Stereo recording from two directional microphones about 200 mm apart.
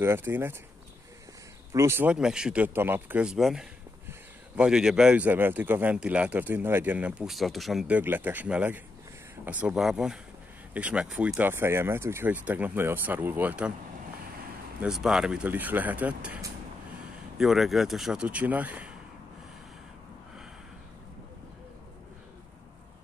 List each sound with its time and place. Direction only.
0.0 s speech: 10° right (ahead or behind)
1.7 s speech: 15° right (ahead or behind)
14.8 s speech: 5° right (ahead or behind)